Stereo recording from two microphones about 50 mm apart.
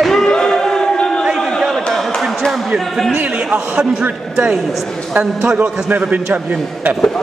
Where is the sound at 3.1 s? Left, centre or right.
Centre.